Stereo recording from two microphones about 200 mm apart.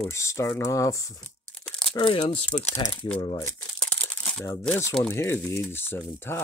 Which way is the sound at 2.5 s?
5° left (ahead or behind).